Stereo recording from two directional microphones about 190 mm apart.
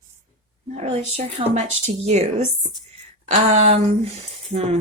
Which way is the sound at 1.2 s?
35° right (ahead or behind).